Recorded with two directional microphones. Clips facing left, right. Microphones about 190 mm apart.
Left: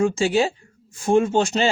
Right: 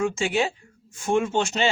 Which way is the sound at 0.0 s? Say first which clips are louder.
Left 5 dB; 35° left (ahead or behind).